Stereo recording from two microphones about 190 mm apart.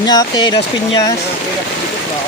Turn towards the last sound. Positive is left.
turn(degrees=20)  # may be behind; listen again after turning